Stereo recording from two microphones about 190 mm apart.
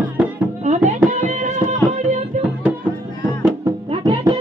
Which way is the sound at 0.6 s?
40° right (ahead or behind).